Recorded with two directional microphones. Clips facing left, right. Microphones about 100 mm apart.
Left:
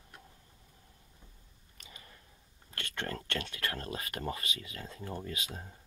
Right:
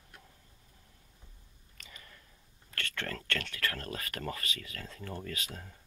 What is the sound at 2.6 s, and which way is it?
Speech, 20° left (ahead or behind).